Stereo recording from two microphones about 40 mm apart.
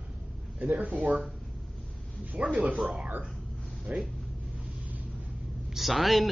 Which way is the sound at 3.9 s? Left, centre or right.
Right.